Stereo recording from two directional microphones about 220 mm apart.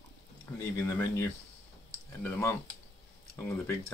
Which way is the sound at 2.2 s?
10° left (ahead or behind).